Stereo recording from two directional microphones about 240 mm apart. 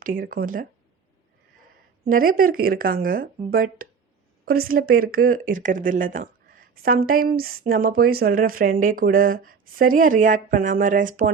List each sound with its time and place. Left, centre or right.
0.0 s speech: right
2.0 s speech: right